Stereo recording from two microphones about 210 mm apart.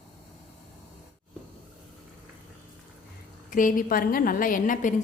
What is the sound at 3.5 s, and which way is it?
A woman's voice, 40° left (ahead or behind).